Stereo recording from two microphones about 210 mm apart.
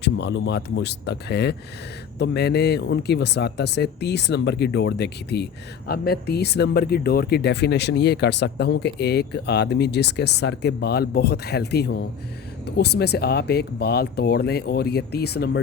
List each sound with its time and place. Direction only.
0.0 s speech: 55° left (ahead or behind)